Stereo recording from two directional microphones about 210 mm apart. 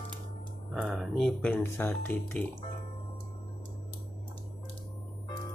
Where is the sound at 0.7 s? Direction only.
Centre (ahead or behind).